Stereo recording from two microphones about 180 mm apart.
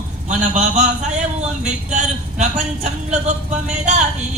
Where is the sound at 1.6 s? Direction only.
40° right (ahead or behind).